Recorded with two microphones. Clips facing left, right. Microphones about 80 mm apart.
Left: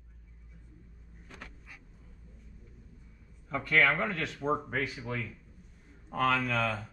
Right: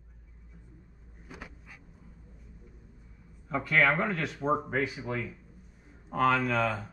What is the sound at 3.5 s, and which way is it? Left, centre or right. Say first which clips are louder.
Speech: right 1 dB; centre.